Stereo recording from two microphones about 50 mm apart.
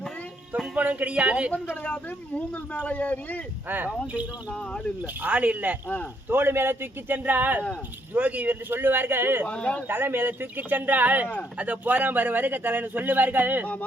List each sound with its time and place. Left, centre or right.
0.8 s a man's voice: right
1.8 s a man's voice: left
4.0 s a man's voice: right
6.2 s a man's voice: right
8.7 s speech: right
9.5 s a man's voice: left
9.9 s a man's voice: right